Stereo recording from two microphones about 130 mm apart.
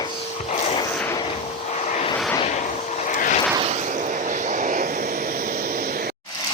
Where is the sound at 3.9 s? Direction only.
90° right.